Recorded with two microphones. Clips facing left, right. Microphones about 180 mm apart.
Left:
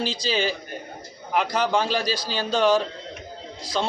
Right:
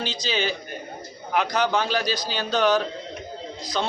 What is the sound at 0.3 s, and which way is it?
Speech, 35° left (ahead or behind).